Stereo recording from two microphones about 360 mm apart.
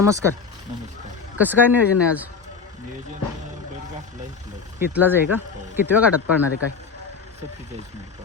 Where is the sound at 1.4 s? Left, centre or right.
Centre.